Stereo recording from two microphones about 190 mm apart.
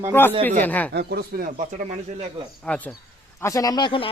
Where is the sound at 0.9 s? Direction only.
55° right (ahead or behind); by 2.3 s 35° right (ahead or behind).